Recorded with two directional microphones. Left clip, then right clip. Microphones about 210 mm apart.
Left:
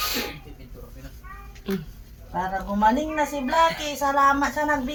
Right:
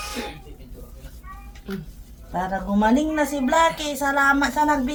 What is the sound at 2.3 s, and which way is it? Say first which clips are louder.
A woman's voice: right 2 dB; 50° right (ahead or behind).